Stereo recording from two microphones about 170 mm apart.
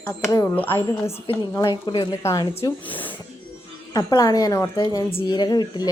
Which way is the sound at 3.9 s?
20° left (ahead or behind).